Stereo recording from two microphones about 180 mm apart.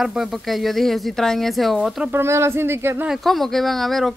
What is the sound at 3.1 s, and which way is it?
Speech, centre (ahead or behind).